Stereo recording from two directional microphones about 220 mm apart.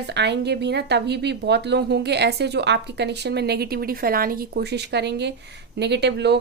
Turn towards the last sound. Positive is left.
turn(degrees=-50)  # may be behind; listen again after turning